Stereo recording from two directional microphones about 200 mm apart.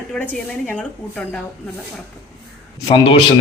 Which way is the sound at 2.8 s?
20° left (ahead or behind).